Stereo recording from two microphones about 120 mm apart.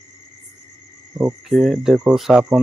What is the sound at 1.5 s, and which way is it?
Speech, centre (ahead or behind).